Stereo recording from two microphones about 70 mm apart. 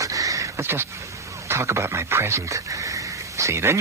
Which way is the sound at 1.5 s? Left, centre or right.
Right.